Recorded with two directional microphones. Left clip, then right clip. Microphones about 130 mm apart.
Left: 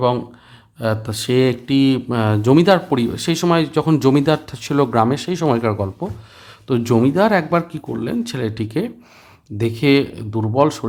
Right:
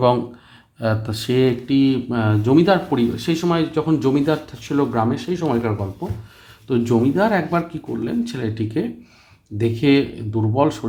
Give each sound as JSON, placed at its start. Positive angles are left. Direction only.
{"t": 0.8, "sound": "speech", "side_deg": 30}